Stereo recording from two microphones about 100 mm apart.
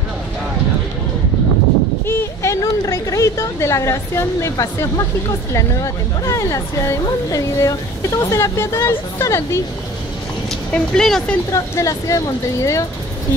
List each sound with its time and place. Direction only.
2.0 s a sound: 30° left (ahead or behind)
5.5 s speech: 35° left (ahead or behind)
10.7 s speech: 5° left (ahead or behind)
11.5 s speech: 35° left (ahead or behind)